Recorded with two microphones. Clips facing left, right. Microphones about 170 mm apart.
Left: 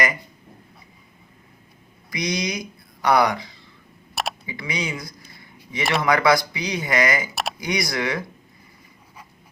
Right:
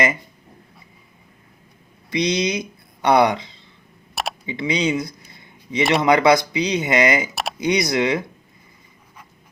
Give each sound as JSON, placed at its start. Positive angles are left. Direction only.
{"t": 2.0, "sound": "speech", "side_deg": -25}
{"t": 4.1, "sound": "computer keyboard", "side_deg": 0}
{"t": 4.4, "sound": "a sound", "side_deg": -25}
{"t": 5.9, "sound": "speech", "side_deg": -20}